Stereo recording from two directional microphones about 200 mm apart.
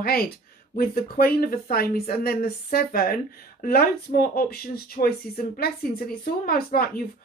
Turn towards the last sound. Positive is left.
turn(degrees=50)  # may be behind; listen again after turning